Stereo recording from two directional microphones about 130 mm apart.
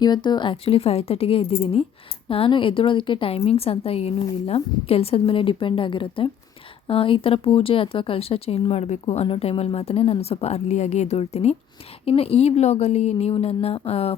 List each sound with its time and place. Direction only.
0.0 s speech: 35° left (ahead or behind); by 14.2 s 50° left (ahead or behind)